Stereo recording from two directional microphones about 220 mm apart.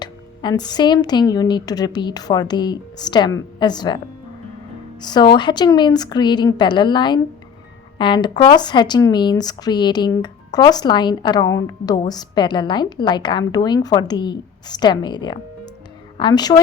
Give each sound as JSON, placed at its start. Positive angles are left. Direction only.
{"t": 0.0, "sound": "speech", "side_deg": 20}